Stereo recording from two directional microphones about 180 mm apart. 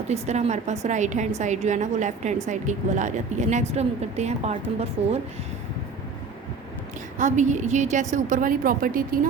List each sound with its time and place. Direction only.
0.1 s a woman's voice: 40° right (ahead or behind)
7.2 s a woman's voice: 45° right (ahead or behind)